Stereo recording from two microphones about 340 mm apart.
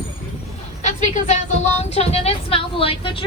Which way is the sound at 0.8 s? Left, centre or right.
Left.